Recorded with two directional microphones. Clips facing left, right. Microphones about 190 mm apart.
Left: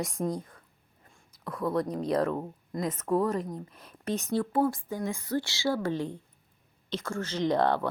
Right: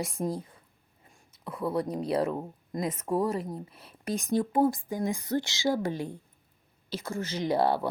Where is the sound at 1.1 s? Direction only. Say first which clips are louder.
Left 1 dB; 10° right (ahead or behind).